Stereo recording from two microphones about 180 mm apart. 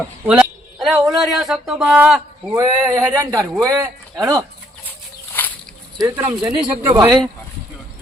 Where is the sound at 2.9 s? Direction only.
20° right (ahead or behind).